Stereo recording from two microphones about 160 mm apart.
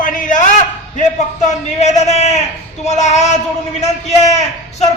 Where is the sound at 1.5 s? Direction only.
45° left (ahead or behind).